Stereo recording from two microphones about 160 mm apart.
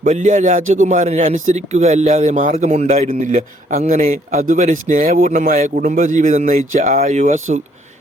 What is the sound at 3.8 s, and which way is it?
A man's voice, 60° right (ahead or behind).